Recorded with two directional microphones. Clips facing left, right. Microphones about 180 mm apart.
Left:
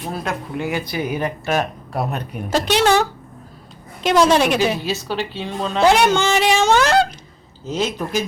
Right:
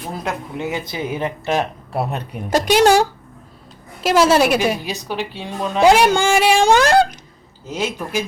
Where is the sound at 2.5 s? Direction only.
10° right (ahead or behind).